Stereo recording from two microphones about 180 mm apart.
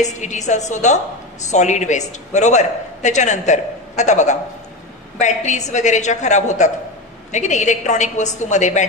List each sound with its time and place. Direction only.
0.0 s a man's voice: 40° left (ahead or behind)